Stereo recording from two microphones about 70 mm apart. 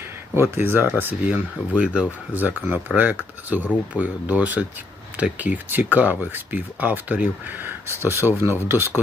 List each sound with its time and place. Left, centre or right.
0.3 s speech: right